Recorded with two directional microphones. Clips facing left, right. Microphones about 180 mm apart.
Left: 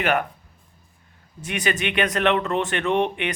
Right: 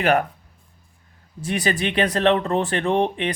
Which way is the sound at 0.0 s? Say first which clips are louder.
Right 3 dB; 35° right (ahead or behind).